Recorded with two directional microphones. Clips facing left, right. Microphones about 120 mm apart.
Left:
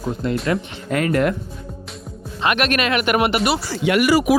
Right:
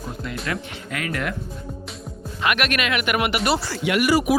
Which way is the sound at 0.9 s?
40° left (ahead or behind).